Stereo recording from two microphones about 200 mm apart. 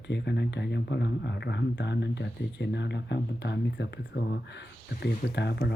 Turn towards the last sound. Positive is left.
turn(degrees=55)  # may be behind; listen again after turning